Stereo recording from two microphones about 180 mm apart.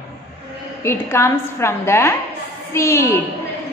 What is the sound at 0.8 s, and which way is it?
A woman's voice, 15° left (ahead or behind).